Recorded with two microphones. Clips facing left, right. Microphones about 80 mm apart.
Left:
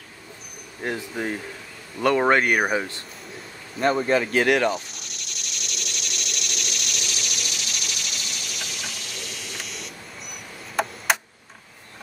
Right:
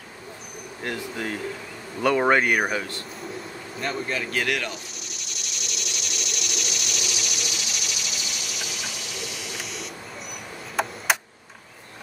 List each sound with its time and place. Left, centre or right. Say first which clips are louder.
0.8 s speech: left 2 dB; centre
2.0 s speech: left 1 dB; centre
2.6 s speech: left 3 dB; centre
3.8 s speech: left 8 dB; left
5.0 s cricket: even; centre
10.8 s tick-tock: left 1 dB; centre